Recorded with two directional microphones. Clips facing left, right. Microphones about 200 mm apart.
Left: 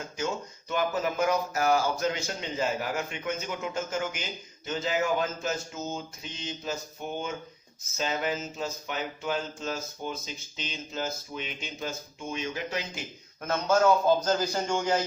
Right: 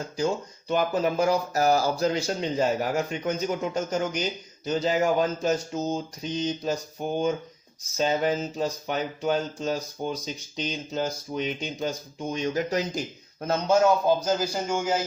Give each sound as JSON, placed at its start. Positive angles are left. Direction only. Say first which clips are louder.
{"t": 0.2, "sound": "speech", "louder": "right 6 dB", "side_deg": -35}
{"t": 13.8, "sound": "a man's voice", "louder": "right 1 dB", "side_deg": -10}